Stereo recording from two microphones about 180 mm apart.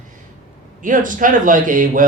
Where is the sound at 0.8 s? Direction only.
45° right (ahead or behind).